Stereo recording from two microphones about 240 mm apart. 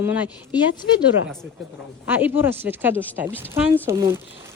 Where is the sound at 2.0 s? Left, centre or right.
Centre.